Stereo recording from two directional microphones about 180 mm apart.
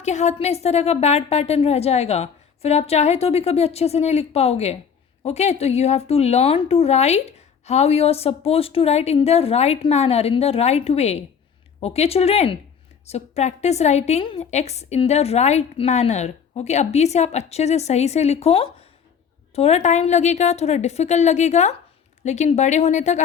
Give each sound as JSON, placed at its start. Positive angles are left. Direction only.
{"t": 0.0, "sound": "a woman's voice", "side_deg": 40}